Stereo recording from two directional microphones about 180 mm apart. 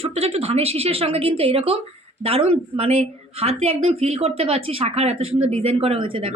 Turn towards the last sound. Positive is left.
turn(degrees=-30)  # may be behind; listen again after turning